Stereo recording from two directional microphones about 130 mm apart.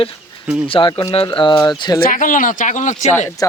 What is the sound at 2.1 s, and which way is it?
Speech, 90° left.